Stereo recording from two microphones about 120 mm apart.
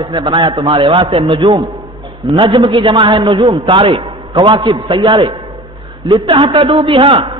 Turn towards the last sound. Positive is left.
turn(degrees=-45)  # may be behind; listen again after turning